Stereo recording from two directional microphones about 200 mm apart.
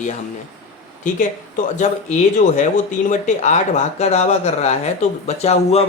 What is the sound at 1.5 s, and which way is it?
Speech, 35° left (ahead or behind).